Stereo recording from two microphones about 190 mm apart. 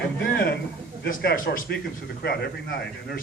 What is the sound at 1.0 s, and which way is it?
Speech, 50° left (ahead or behind).